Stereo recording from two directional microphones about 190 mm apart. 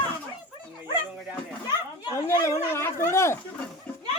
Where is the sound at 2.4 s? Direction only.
15° left (ahead or behind).